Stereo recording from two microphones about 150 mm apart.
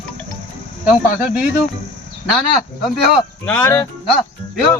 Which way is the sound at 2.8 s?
Centre (ahead or behind).